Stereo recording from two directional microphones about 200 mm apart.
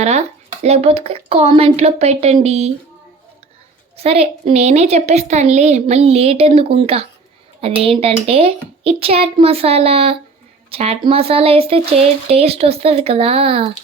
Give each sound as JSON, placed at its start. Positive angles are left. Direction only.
{"t": 0.0, "sound": "a woman's voice", "side_deg": -35}
{"t": 3.9, "sound": "a woman's voice", "side_deg": -30}